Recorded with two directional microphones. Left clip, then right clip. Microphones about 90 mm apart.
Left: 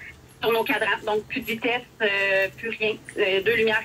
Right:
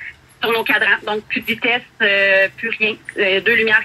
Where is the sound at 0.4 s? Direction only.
35° left (ahead or behind).